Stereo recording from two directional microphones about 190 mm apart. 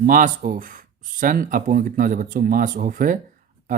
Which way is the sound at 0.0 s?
45° right (ahead or behind).